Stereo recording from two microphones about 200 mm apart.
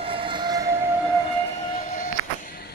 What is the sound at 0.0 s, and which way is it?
Train, 25° right (ahead or behind).